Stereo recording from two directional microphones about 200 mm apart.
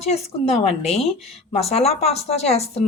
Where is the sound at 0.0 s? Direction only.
30° left (ahead or behind).